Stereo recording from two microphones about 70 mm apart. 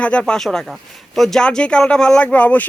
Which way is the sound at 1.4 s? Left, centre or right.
Centre.